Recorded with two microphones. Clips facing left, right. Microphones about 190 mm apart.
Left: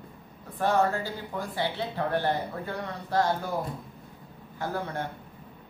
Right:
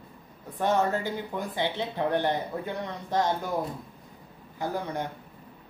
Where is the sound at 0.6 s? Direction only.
20° right (ahead or behind).